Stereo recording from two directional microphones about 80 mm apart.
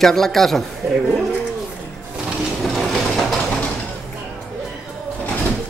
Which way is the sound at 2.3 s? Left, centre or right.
Centre.